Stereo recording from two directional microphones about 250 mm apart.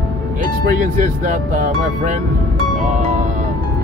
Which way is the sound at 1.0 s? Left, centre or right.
Right.